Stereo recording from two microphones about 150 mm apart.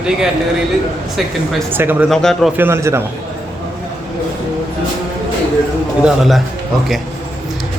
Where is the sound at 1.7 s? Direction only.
15° right (ahead or behind).